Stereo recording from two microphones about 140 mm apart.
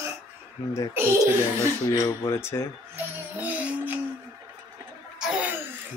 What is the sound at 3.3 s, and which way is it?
Music, 10° right (ahead or behind).